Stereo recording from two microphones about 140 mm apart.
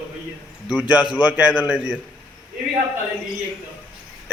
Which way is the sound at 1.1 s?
10° right (ahead or behind).